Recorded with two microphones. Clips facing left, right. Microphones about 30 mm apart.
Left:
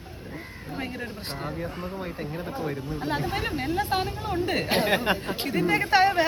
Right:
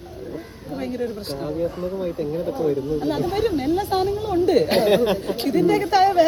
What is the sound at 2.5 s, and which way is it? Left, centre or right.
Speech, left.